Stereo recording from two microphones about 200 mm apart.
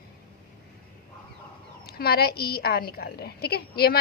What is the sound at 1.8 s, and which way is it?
Speech, 50° left (ahead or behind).